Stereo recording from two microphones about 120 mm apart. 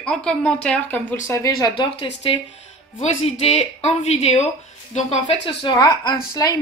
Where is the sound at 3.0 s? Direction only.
65° left (ahead or behind).